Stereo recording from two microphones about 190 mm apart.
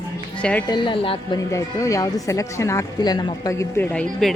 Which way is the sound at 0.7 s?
25° left (ahead or behind).